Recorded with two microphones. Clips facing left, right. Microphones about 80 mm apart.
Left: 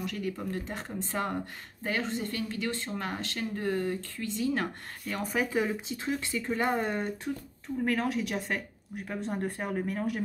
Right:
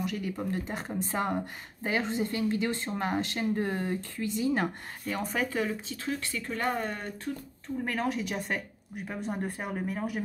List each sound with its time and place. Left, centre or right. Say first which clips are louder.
0.0 s speech: right 1 dB; centre
5.0 s speech: even; centre; by 7.1 s left
7.8 s speech: left 2 dB; centre